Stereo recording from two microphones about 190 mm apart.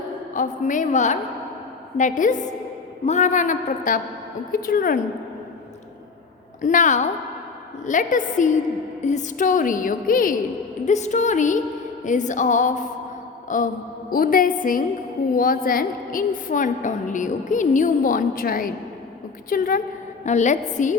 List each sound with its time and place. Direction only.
0.3 s a man's voice: 45° left (ahead or behind)
6.6 s a man's voice: 40° left (ahead or behind)